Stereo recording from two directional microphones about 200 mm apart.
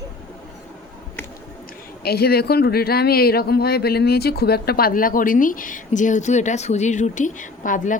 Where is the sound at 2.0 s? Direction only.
50° left (ahead or behind).